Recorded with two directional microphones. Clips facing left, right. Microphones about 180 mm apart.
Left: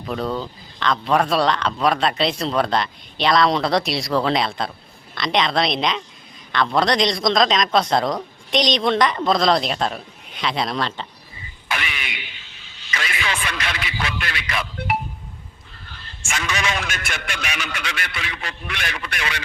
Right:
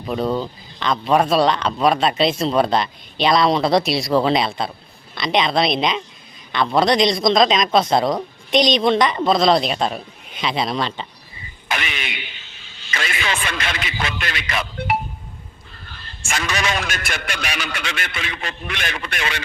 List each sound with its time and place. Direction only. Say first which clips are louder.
0.0 s speech: right 3 dB; 15° right (ahead or behind)
3.5 s a woman's voice: right 3 dB; 5° right (ahead or behind)
11.7 s music: right 2 dB; 25° right (ahead or behind)
14.5 s speech: right 2 dB; 25° right (ahead or behind)
16.3 s a man's voice: right 2 dB; 40° right (ahead or behind)